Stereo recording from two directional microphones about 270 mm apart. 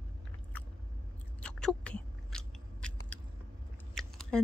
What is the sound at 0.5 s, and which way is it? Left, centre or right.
Biting, centre.